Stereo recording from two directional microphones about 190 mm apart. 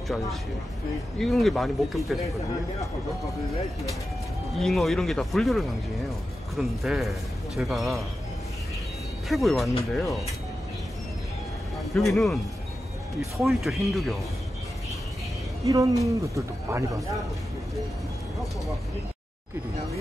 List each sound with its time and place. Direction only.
1.2 s speech: centre (ahead or behind)
4.6 s speech: centre (ahead or behind)
9.3 s speech: centre (ahead or behind)
11.9 s speech: centre (ahead or behind)
13.4 s speech: centre (ahead or behind)
15.6 s speech: 15° right (ahead or behind)